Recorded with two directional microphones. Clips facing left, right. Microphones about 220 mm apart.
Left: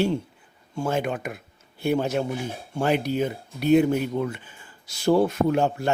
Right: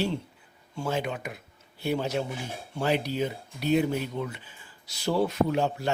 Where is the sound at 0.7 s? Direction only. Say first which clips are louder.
Left 4 dB; 50° left (ahead or behind).